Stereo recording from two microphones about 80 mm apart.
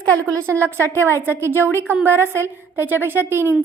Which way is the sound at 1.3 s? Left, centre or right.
Right.